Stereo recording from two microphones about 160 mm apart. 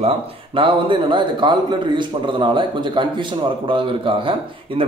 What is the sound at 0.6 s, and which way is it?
A man's voice, 30° right (ahead or behind).